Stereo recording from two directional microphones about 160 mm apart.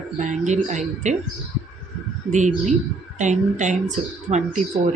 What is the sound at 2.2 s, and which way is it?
Speech, 50° right (ahead or behind).